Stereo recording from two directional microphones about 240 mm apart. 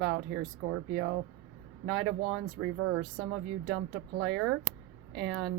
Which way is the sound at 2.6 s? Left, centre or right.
Right.